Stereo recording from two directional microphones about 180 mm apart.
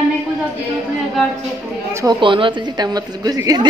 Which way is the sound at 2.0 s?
25° right (ahead or behind).